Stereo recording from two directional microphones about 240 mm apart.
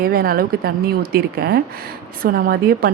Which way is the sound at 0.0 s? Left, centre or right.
Right.